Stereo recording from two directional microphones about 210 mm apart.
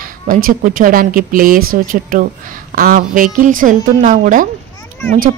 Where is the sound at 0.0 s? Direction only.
40° right (ahead or behind).